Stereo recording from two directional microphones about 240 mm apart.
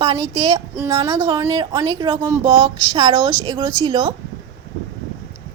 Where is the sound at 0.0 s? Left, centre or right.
Centre.